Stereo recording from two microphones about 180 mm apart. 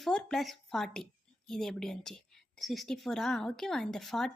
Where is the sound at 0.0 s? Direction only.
5° left (ahead or behind).